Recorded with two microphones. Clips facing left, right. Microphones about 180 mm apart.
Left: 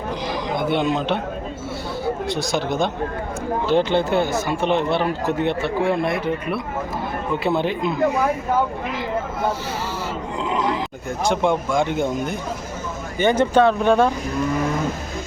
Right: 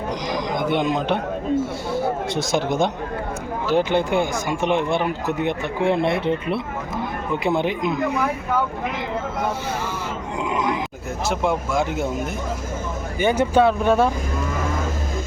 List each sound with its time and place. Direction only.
0.8 s speech: 10° right (ahead or behind)
3.7 s speech: 10° right (ahead or behind); by 6.6 s 25° right (ahead or behind)
7.4 s speech: 15° right (ahead or behind)
11.2 s speech: 5° right (ahead or behind)